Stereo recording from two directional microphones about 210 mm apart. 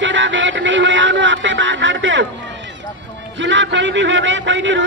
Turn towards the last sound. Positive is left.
turn(degrees=-60)  # may be behind; listen again after turning